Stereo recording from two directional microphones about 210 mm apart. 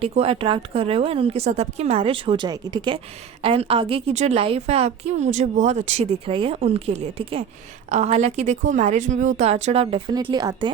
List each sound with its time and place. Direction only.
0.0 s a woman's voice: 30° right (ahead or behind)